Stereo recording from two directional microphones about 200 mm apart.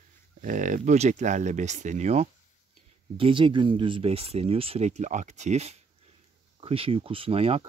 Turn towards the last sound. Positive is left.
turn(degrees=-30)  # may be behind; listen again after turning